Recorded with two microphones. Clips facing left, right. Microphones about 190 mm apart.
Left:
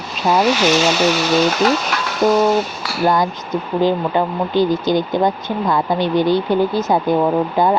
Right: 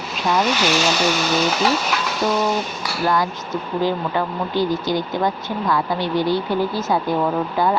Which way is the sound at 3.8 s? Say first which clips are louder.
Left 5 dB; 20° left (ahead or behind).